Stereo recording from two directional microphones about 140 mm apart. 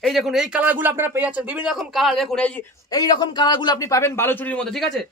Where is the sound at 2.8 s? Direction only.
30° left (ahead or behind).